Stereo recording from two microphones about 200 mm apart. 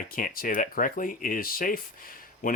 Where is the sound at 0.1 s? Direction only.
45° left (ahead or behind).